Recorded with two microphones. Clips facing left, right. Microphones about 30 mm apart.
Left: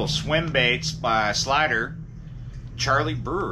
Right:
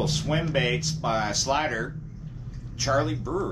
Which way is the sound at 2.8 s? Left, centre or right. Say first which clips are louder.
Left 2 dB; left.